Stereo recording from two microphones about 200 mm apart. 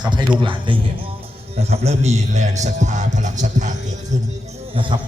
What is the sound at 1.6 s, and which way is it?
Music, 30° right (ahead or behind).